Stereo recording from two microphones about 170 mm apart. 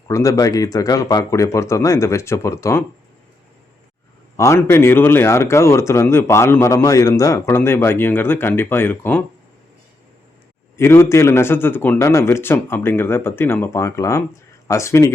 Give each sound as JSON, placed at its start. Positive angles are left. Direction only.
{"t": 0.1, "sound": "speech", "side_deg": 15}
{"t": 4.4, "sound": "speech", "side_deg": 15}
{"t": 10.8, "sound": "speech", "side_deg": 15}